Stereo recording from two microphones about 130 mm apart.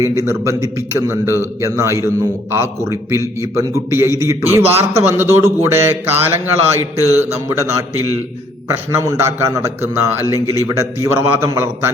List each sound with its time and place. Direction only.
0.0 s a man's voice: 25° right (ahead or behind)